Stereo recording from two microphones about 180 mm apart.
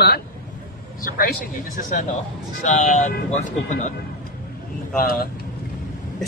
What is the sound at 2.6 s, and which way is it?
Speech, 45° left (ahead or behind).